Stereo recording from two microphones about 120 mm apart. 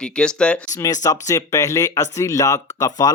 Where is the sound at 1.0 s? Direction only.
30° left (ahead or behind).